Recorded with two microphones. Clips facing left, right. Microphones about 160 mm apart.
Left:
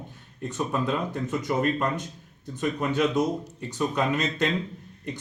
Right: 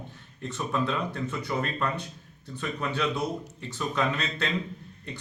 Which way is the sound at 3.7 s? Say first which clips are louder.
Left 3 dB; 15° left (ahead or behind).